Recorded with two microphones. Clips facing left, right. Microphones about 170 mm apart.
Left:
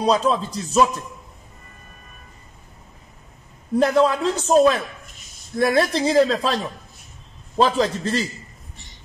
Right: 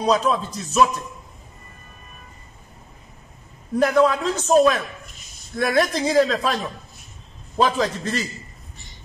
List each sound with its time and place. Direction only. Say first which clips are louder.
0.0 s speech: left 1 dB; 30° left (ahead or behind)
3.8 s speech: even; 25° left (ahead or behind)
7.6 s a man's voice: left 2 dB; 30° left (ahead or behind)